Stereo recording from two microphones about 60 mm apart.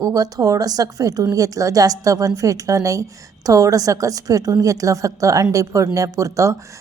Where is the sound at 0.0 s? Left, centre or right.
Right.